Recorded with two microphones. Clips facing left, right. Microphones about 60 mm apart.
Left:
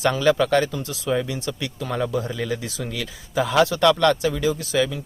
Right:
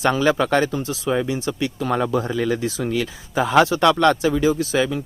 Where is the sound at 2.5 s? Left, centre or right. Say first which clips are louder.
Right 7 dB; right.